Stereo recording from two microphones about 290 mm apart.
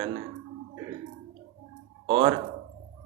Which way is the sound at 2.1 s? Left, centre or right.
Centre.